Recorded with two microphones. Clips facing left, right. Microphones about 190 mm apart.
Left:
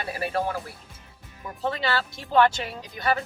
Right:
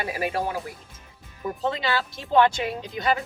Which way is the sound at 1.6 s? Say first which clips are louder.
Even; 20° right (ahead or behind).